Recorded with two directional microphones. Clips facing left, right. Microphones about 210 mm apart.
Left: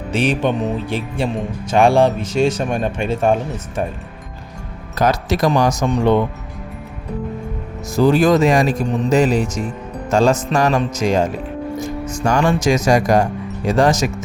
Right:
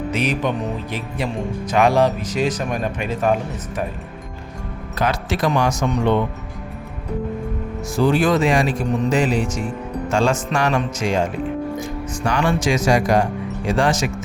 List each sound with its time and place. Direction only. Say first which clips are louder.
0.1 s speech: left 6 dB; 30° left (ahead or behind)
4.9 s speech: left 4 dB; 40° left (ahead or behind)
7.9 s speech: left 4 dB; 40° left (ahead or behind)